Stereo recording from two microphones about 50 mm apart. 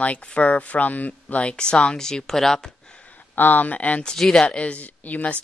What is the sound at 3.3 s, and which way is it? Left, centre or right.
Speech, left.